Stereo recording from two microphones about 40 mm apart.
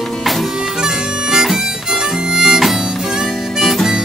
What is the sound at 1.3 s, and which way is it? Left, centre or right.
Harmonica, centre.